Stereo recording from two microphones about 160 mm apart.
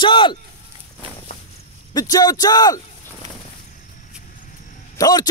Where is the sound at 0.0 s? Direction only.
30° left (ahead or behind).